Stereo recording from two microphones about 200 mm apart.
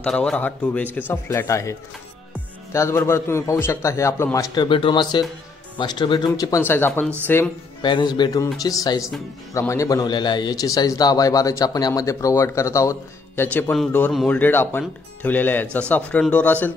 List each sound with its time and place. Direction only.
0.0 s a man's voice: 5° left (ahead or behind)
7.8 s a man's voice: 20° left (ahead or behind)